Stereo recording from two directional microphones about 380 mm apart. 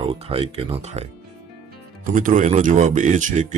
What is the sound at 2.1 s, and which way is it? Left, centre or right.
Speech, centre.